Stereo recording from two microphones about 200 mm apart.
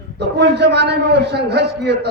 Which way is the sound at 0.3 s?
55° right (ahead or behind).